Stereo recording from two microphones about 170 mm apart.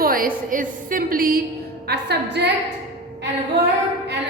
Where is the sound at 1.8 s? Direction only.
80° right.